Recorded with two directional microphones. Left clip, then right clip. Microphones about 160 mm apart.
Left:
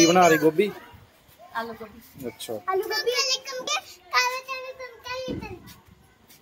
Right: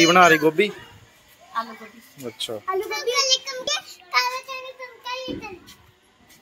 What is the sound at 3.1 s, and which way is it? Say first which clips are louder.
Child singing: right 5 dB; 50° left (ahead or behind).